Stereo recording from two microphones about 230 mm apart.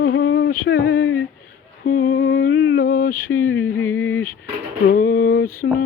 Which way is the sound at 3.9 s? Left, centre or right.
Left.